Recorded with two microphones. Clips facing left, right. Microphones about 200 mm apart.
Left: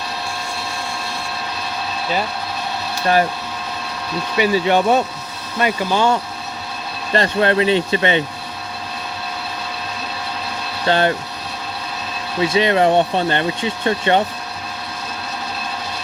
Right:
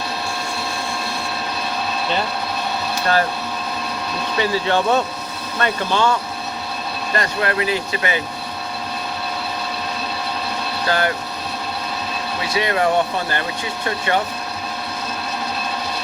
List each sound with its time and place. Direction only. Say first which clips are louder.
4.4 s speech: left 4 dB; 15° left (ahead or behind)
7.1 s speech: left 6 dB; 30° left (ahead or behind)
10.8 s speech: left 4 dB; 25° left (ahead or behind)
12.5 s speech: left 3 dB; 25° left (ahead or behind)